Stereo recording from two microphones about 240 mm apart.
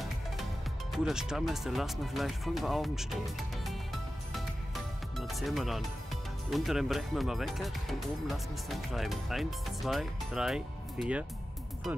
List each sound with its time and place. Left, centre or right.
0.9 s speech: centre
5.1 s speech: centre